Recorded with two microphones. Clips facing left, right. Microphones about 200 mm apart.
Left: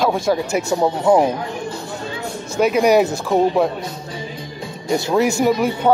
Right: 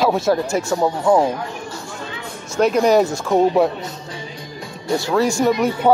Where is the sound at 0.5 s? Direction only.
20° left (ahead or behind).